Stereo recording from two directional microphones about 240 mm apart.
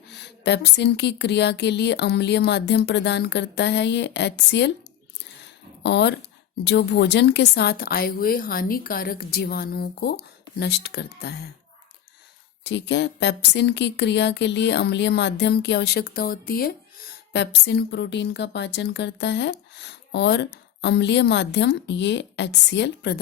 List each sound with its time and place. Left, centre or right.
0.1 s a woman's voice: left
5.8 s a woman's voice: left
12.6 s a woman's voice: left